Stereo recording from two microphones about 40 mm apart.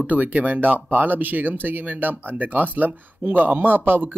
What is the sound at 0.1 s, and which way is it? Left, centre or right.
Speech, right.